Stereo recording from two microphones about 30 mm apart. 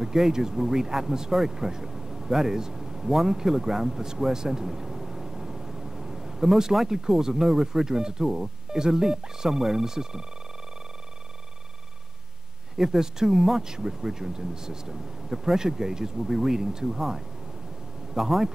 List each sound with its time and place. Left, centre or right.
0.0 s speech: centre
12.7 s speech: centre
18.1 s speech: centre